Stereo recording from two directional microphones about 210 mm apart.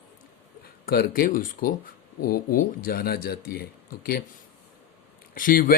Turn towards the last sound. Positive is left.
turn(degrees=40)  # may be behind; listen again after turning